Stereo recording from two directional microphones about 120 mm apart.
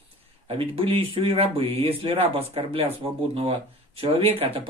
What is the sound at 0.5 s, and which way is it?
Speech, 50° right (ahead or behind).